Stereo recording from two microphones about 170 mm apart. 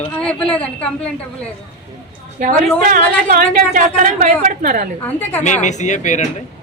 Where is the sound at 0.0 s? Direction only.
5° left (ahead or behind).